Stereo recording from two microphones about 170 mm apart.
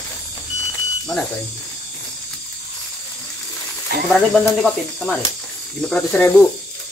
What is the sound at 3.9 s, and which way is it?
Speech, 70° right (ahead or behind).